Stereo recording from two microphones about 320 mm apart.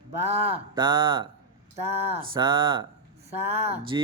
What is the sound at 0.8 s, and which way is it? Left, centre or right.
A man's voice, centre.